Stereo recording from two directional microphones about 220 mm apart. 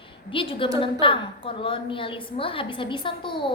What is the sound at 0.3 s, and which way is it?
A woman's voice, 25° left (ahead or behind).